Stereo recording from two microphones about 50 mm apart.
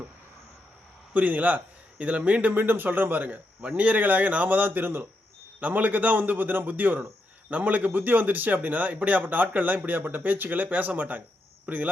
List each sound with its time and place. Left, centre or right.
1.1 s a man's voice: right
2.6 s speech: right
5.5 s speech: right